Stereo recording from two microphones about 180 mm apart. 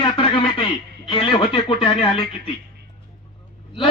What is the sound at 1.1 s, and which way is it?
Speech, 25° left (ahead or behind).